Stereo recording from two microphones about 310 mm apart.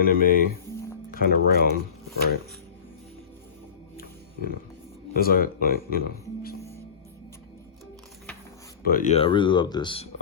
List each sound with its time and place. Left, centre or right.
0.0 s speech: left
3.9 s music: left
5.1 s speech: left
8.8 s speech: left